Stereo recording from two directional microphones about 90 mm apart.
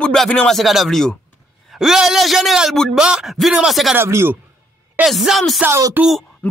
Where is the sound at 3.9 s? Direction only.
25° right (ahead or behind).